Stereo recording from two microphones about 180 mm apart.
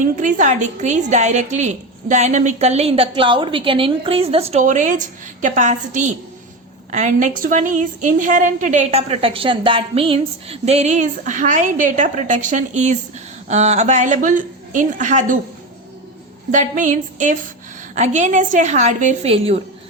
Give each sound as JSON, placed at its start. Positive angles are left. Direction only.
{"t": 0.0, "sound": "a woman's voice", "side_deg": -45}
{"t": 16.5, "sound": "a woman's voice", "side_deg": -45}